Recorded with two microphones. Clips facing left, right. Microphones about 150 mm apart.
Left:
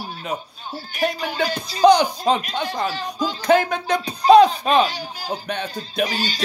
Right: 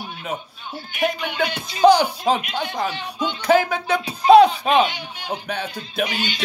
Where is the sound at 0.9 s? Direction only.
35° left (ahead or behind).